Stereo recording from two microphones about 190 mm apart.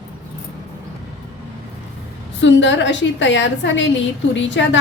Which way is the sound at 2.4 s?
70° left (ahead or behind).